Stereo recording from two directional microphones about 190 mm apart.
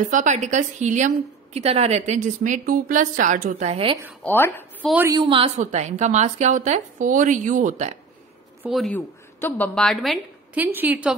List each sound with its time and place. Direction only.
0.1 s a woman's voice: 40° right (ahead or behind)
3.6 s a woman's voice: 30° right (ahead or behind)
4.2 s a woman's voice: 10° left (ahead or behind)
4.8 s a woman's voice: 5° right (ahead or behind)
5.1 s a woman's voice: 25° right (ahead or behind)
8.6 s a woman's voice: centre (ahead or behind)
10.5 s a woman's voice: 10° right (ahead or behind)